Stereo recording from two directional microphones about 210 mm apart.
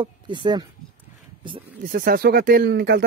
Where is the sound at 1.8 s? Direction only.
45° right (ahead or behind).